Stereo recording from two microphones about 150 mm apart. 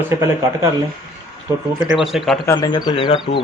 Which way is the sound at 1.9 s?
Centre (ahead or behind).